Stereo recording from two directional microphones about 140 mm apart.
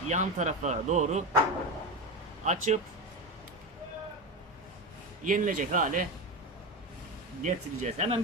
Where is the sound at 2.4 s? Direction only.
55° right (ahead or behind).